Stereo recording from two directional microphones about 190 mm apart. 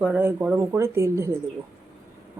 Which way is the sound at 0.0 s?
10° right (ahead or behind).